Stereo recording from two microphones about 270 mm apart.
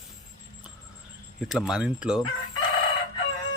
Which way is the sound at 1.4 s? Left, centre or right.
Centre.